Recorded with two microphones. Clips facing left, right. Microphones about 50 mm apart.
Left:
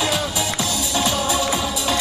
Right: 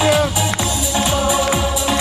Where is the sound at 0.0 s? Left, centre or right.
Right.